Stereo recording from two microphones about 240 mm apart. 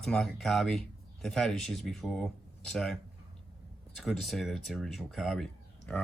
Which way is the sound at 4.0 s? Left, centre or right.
Centre.